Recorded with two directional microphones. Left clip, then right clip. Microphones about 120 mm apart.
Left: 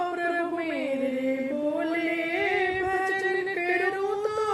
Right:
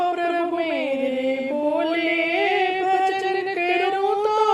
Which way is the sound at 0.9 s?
35° right (ahead or behind).